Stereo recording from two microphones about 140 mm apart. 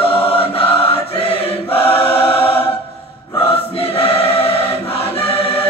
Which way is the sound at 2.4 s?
15° left (ahead or behind).